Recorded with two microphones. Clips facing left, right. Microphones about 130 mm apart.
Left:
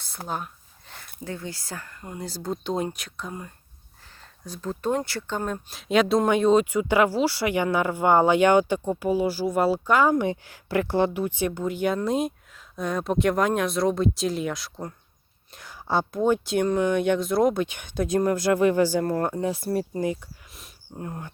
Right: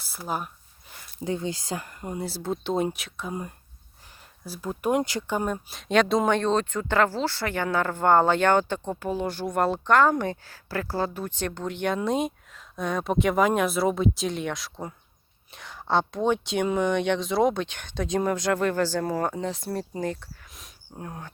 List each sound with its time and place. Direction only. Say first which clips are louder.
0.3 s speech: right 1 dB; 5° right (ahead or behind)
1.2 s speech: right 5 dB; 20° right (ahead or behind)
2.2 s speech: left 1 dB; 5° right (ahead or behind)
4.4 s speech: even; 10° right (ahead or behind)
5.5 s speech: left 1 dB; centre (ahead or behind)
19.0 s speech: left 2 dB; centre (ahead or behind)